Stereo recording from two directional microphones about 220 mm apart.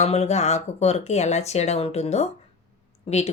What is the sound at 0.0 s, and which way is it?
Speech, 30° left (ahead or behind).